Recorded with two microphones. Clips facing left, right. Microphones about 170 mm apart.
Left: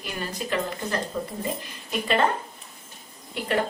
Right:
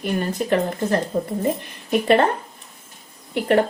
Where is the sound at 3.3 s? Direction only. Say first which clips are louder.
Right 8 dB; 60° right (ahead or behind).